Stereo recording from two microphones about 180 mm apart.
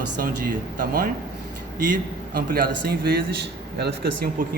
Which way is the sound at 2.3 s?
55° right (ahead or behind).